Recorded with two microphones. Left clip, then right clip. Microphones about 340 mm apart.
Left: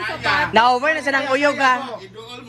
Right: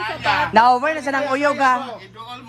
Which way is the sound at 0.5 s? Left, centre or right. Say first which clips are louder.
Right 2 dB; right.